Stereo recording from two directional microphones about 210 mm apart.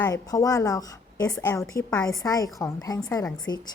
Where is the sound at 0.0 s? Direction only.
20° left (ahead or behind).